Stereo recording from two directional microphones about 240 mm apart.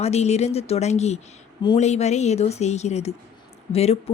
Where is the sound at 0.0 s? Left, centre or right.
Left.